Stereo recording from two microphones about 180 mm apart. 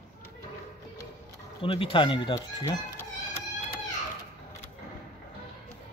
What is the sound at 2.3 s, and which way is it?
Speech, 15° left (ahead or behind).